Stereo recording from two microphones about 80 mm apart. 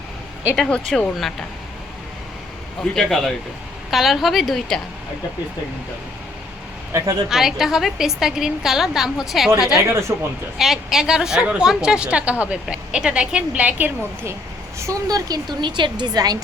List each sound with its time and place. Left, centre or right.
0.5 s a woman's voice: centre
2.8 s a woman's voice: centre
6.9 s speech: right
7.3 s a woman's voice: centre
9.9 s speech: right
10.6 s a woman's voice: centre; by 13.9 s right
14.8 s speech: right
15.6 s a woman's voice: right